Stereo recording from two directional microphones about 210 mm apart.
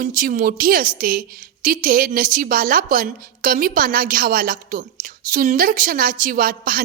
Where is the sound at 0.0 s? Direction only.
40° right (ahead or behind).